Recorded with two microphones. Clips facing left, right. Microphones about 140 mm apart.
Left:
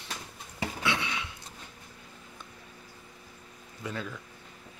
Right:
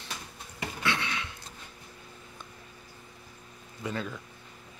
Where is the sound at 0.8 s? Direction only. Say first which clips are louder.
Right 1 dB; 10° left (ahead or behind).